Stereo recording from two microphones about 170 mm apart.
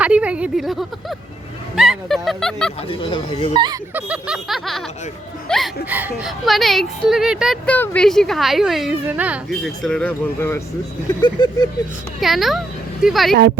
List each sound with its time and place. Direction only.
0.0 s speech: 5° right (ahead or behind)
2.9 s speech: 30° left (ahead or behind)
3.5 s speech: 25° right (ahead or behind)
3.9 s speech: 5° right (ahead or behind)
5.9 s speech: 10° right (ahead or behind)
7.7 s speech: 5° left (ahead or behind); by 9.4 s 10° right (ahead or behind)
9.5 s speech: 5° left (ahead or behind)
11.2 s speech: 25° left (ahead or behind)
12.2 s speech: centre (ahead or behind)